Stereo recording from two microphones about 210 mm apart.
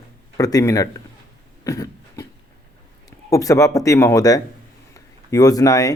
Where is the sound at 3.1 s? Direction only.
15° left (ahead or behind).